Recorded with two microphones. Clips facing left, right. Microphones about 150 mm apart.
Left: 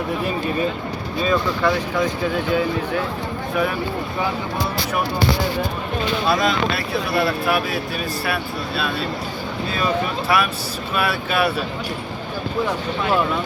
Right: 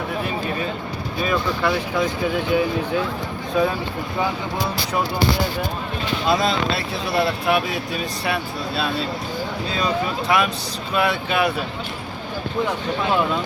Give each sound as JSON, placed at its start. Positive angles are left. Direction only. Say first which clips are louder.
{"t": 1.3, "sound": "speech", "louder": "left 2 dB", "side_deg": -10}
{"t": 6.2, "sound": "speech", "louder": "right 1 dB", "side_deg": -30}
{"t": 10.2, "sound": "speech", "louder": "right 1 dB", "side_deg": -20}